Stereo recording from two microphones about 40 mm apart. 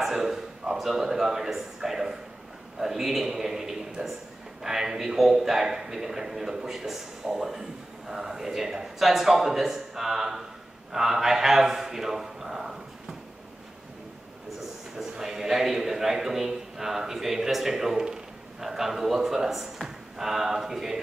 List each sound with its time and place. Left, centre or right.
0.0 s a sound: centre
0.9 s a man's voice: centre
4.0 s speech: right
4.6 s a man's voice: centre
15.0 s a man's voice: centre